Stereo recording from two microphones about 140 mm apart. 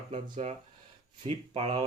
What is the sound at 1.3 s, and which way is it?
Speech, 45° right (ahead or behind).